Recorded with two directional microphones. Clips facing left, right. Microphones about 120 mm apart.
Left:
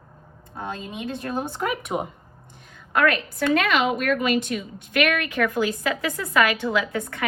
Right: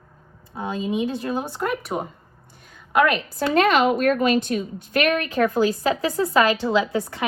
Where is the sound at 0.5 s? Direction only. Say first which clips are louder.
Right 7 dB; 10° right (ahead or behind).